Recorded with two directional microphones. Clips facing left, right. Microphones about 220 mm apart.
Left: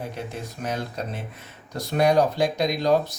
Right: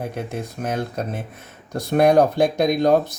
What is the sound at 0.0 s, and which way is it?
Speech, 50° right (ahead or behind).